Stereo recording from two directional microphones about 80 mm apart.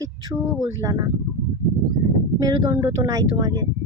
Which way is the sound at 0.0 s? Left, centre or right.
Right.